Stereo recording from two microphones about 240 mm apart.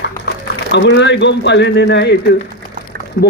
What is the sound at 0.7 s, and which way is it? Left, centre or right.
A man's voice, left.